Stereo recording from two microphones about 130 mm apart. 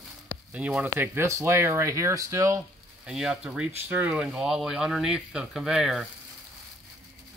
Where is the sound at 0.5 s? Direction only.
10° right (ahead or behind).